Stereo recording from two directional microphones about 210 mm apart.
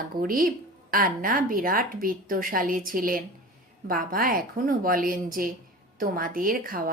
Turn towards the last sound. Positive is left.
turn(degrees=-40)  # may be behind; listen again after turning